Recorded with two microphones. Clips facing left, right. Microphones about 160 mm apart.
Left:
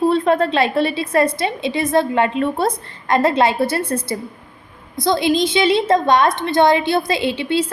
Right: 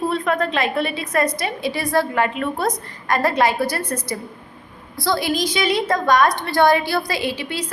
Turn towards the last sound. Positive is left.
turn(degrees=25)  # may be behind; listen again after turning